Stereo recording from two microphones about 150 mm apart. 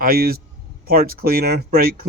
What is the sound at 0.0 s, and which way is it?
Speech, 80° right.